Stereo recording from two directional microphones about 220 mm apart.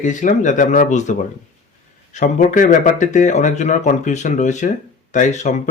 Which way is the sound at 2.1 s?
35° left (ahead or behind).